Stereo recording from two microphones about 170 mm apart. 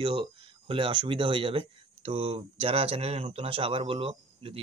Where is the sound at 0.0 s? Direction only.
30° right (ahead or behind).